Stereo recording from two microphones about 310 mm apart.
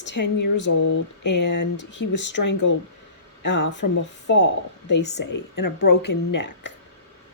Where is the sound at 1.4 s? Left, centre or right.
Left.